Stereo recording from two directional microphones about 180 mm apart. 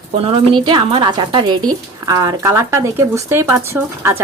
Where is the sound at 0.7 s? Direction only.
25° right (ahead or behind).